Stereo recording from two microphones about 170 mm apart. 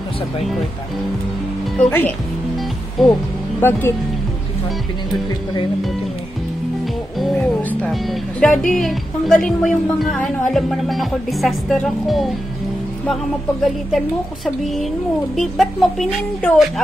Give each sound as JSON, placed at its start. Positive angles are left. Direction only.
{"t": 1.8, "sound": "speech", "side_deg": 10}
{"t": 3.6, "sound": "speech", "side_deg": 15}
{"t": 7.2, "sound": "speech", "side_deg": 5}
{"t": 13.9, "sound": "speech", "side_deg": 0}